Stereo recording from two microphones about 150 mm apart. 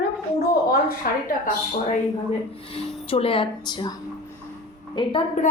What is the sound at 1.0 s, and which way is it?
Speech, 85° left.